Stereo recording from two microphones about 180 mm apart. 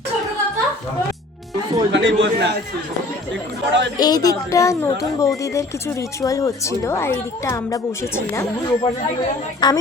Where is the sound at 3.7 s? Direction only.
85° right.